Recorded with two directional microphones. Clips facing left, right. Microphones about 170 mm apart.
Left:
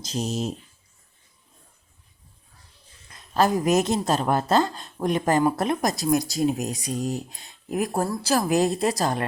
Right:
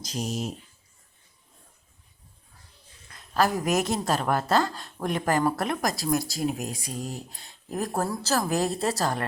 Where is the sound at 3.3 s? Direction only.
20° left (ahead or behind).